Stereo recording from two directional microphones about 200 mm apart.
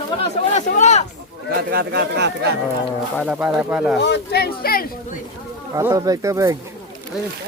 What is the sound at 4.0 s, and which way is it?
Speech, 55° left (ahead or behind).